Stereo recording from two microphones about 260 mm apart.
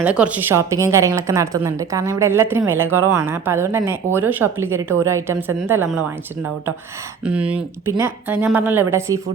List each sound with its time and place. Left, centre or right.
0.0 s a woman's voice: centre
7.3 s a woman's voice: centre